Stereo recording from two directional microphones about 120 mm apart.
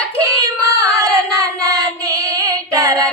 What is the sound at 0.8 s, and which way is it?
Singing, 30° right (ahead or behind).